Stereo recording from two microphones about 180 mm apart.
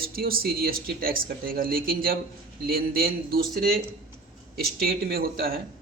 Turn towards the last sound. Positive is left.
turn(degrees=-55)  # may be behind; listen again after turning